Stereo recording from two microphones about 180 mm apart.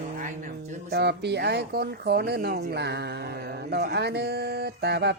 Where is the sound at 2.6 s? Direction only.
65° right (ahead or behind).